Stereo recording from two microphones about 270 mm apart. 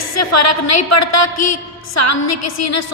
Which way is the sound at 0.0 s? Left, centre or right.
Left.